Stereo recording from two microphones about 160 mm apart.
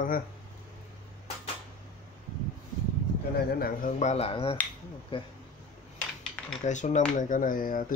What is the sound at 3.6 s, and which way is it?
Speech, 65° left (ahead or behind).